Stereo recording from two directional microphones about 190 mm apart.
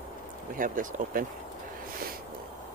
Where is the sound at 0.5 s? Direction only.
45° right (ahead or behind).